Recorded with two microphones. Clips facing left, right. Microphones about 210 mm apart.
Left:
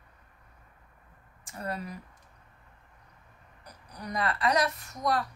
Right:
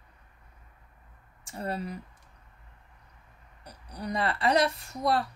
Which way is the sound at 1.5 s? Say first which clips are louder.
Right 3 dB; 30° right (ahead or behind).